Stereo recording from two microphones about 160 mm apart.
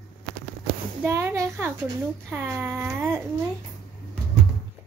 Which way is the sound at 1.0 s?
15° right (ahead or behind).